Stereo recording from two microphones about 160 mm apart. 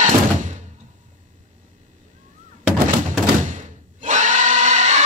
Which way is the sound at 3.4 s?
50° right (ahead or behind).